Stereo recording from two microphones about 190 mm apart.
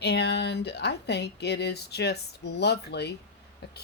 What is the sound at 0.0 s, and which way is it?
A woman's voice, 65° left (ahead or behind).